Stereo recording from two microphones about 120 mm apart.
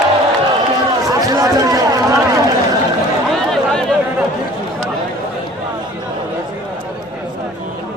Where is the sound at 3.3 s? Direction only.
Centre (ahead or behind).